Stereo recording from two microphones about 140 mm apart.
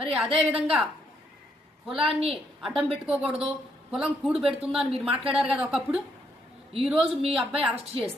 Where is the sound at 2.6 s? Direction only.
Centre (ahead or behind).